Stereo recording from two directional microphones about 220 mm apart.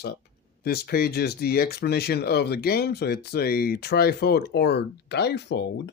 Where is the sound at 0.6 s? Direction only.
45° left (ahead or behind).